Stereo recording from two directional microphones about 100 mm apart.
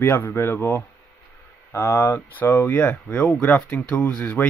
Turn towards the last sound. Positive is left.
turn(degrees=15)  # may be behind; listen again after turning